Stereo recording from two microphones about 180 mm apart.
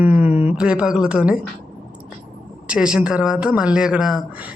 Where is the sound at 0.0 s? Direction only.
10° right (ahead or behind).